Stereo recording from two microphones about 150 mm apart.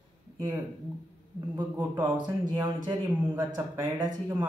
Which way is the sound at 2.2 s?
30° right (ahead or behind).